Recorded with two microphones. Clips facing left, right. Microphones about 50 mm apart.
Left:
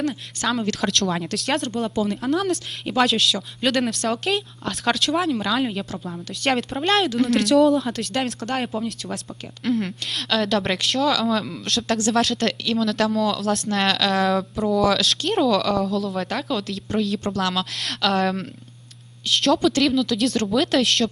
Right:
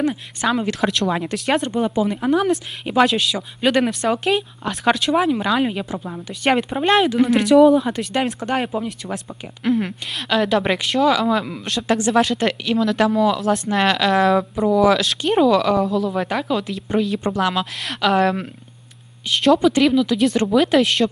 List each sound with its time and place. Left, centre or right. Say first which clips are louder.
0.0 s a woman's voice: right 4 dB; centre